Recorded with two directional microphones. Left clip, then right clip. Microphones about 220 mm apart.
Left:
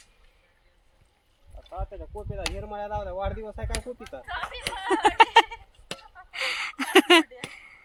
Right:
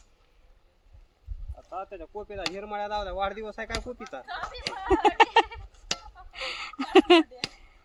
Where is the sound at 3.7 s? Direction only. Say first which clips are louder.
Right 1 dB; 40° left (ahead or behind).